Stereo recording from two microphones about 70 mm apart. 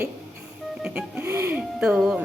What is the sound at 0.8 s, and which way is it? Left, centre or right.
Wheeze, centre.